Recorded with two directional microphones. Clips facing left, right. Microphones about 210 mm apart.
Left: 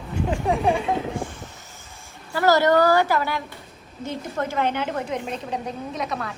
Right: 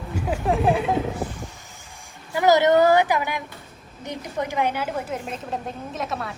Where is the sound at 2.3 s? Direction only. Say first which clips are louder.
Right 1 dB; 15° right (ahead or behind).